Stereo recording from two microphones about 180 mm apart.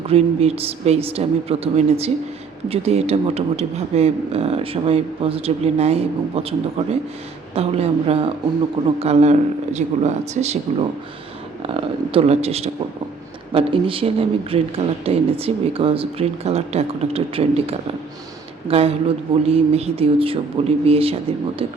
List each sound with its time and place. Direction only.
0.1 s a man's voice: 35° right (ahead or behind)
11.6 s a man's voice: 30° right (ahead or behind)